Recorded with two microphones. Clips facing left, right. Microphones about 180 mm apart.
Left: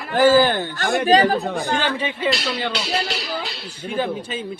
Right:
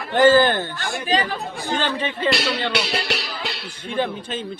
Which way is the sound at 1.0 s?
40° left (ahead or behind).